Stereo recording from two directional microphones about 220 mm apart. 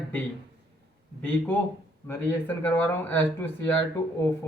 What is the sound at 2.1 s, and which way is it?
Speech, 10° left (ahead or behind).